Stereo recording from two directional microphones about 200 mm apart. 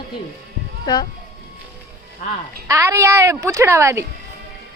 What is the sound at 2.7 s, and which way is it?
A child's voice, 15° right (ahead or behind).